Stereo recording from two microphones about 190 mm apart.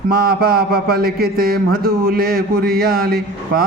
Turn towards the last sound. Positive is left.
turn(degrees=-55)  # may be behind; listen again after turning